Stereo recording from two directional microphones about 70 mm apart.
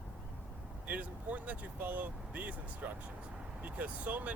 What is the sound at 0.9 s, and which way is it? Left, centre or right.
Speech, right.